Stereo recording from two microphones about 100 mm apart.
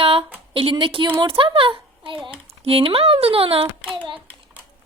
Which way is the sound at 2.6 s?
70° right (ahead or behind).